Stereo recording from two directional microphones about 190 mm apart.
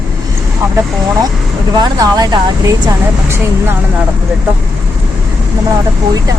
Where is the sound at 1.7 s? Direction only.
20° right (ahead or behind).